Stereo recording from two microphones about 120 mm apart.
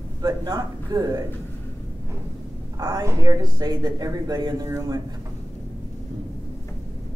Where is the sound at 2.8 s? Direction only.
30° right (ahead or behind).